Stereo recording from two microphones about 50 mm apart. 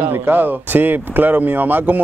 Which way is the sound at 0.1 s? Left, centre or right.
Right.